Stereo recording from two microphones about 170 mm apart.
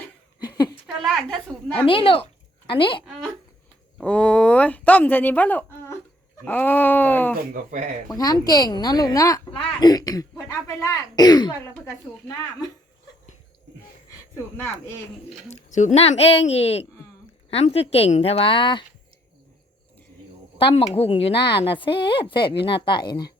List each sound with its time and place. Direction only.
0.4 s a sound: 25° left (ahead or behind)
1.0 s a woman's voice: 5° left (ahead or behind)
1.8 s a woman's voice: 30° left (ahead or behind)
3.9 s speech: 5° left (ahead or behind)
7.5 s speech: 55° right (ahead or behind)
8.1 s a woman's voice: 20° left (ahead or behind)
14.3 s speech: 10° left (ahead or behind)
15.4 s speech: 45° left (ahead or behind)
20.6 s a woman's voice: 30° left (ahead or behind)